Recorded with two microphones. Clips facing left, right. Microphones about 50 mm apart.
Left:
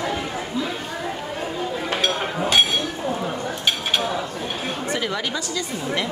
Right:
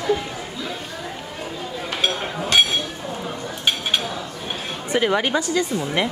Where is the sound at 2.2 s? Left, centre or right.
Centre.